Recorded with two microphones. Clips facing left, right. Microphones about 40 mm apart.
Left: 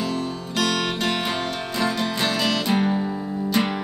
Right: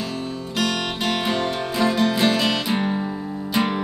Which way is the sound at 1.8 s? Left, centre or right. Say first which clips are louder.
Right 5 dB; centre.